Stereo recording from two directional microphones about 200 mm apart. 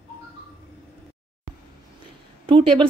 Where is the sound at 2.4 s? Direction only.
25° right (ahead or behind).